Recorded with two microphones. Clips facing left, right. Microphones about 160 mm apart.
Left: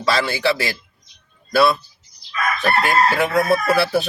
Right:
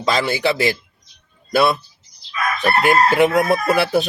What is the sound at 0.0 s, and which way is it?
Speech, 20° right (ahead or behind).